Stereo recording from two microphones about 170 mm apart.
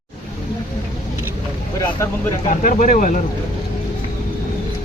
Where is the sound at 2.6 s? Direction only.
50° left (ahead or behind).